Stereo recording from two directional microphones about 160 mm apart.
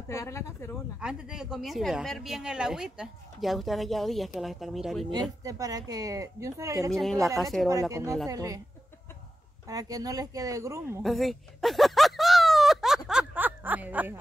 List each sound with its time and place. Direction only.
0.1 s speech: 20° left (ahead or behind)
0.9 s speech: 5° right (ahead or behind)
5.1 s speech: 20° right (ahead or behind)
6.9 s speech: centre (ahead or behind)
7.9 s speech: 20° right (ahead or behind)
9.7 s speech: 25° right (ahead or behind)
11.0 s a sound: centre (ahead or behind)